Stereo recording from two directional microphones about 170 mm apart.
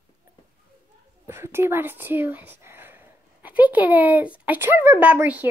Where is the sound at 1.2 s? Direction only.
15° right (ahead or behind).